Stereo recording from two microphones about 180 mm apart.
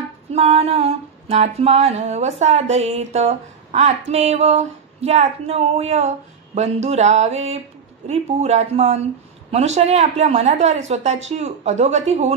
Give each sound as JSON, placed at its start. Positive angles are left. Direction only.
{"t": 0.3, "sound": "female singing", "side_deg": -35}